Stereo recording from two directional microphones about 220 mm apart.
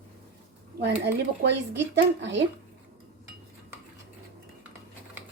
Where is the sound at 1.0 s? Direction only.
50° right (ahead or behind).